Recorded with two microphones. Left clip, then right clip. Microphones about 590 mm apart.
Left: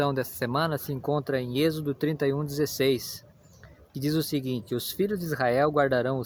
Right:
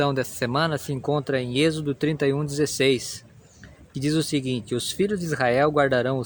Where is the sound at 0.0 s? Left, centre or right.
Left.